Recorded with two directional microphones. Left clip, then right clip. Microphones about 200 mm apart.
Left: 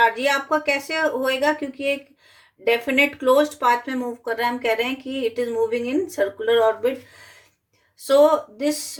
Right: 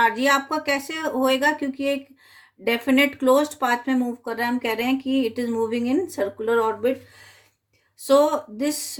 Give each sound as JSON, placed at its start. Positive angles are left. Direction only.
{"t": 0.0, "sound": "speech", "side_deg": -35}
{"t": 2.6, "sound": "speech", "side_deg": -35}
{"t": 8.0, "sound": "speech", "side_deg": -35}